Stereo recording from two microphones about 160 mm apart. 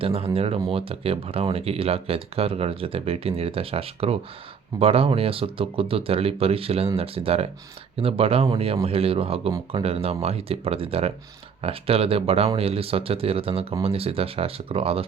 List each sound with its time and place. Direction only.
0.0 s speech: 35° right (ahead or behind)